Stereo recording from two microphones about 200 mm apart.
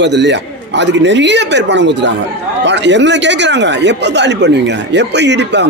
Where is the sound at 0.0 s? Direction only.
60° right (ahead or behind).